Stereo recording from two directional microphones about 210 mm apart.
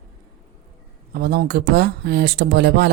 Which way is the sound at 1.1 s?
50° right (ahead or behind).